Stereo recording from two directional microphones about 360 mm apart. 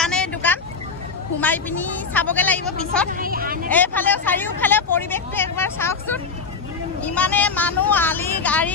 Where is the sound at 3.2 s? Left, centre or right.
Right.